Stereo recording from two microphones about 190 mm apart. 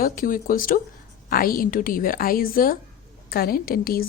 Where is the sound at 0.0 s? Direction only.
50° left (ahead or behind).